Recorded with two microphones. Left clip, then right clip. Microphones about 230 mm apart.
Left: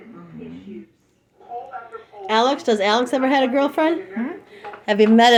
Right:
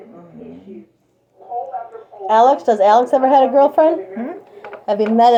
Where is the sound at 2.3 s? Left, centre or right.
Left.